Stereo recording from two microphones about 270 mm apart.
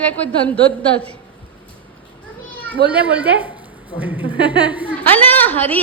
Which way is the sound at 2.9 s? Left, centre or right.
Centre.